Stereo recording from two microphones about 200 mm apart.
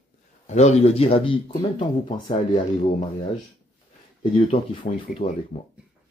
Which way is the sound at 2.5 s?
35° left (ahead or behind).